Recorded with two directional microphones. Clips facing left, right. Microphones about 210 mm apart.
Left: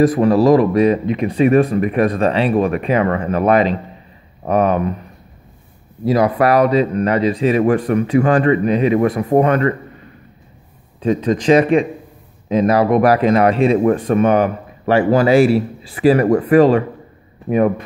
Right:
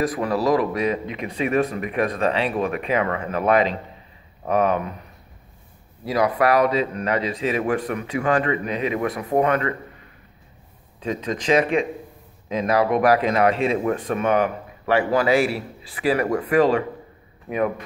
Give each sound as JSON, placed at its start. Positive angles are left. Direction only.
{"t": 0.0, "sound": "speech", "side_deg": 25}
{"t": 0.5, "sound": "speech", "side_deg": 40}
{"t": 6.1, "sound": "speech", "side_deg": 35}
{"t": 11.0, "sound": "speech", "side_deg": 40}